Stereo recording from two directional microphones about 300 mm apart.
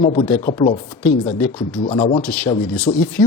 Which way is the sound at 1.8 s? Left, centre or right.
Centre.